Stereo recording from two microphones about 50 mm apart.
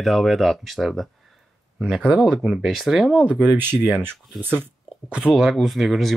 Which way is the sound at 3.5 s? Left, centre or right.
Right.